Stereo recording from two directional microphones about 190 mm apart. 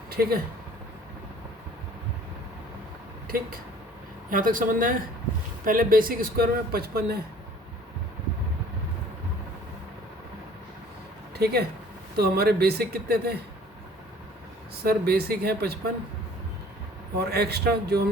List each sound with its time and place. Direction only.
0.1 s speech: 55° right (ahead or behind)
4.3 s speech: 45° right (ahead or behind)
11.3 s speech: 55° right (ahead or behind)
14.8 s speech: 55° right (ahead or behind)
17.2 s speech: 55° right (ahead or behind)